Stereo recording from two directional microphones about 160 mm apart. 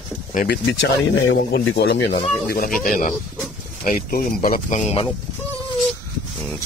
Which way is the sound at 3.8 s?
65° left (ahead or behind).